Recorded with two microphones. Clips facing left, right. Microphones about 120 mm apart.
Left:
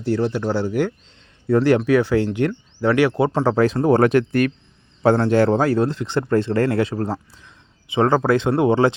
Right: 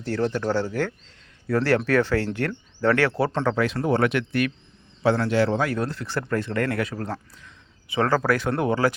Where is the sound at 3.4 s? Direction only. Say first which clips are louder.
Left 9 dB; 35° left (ahead or behind).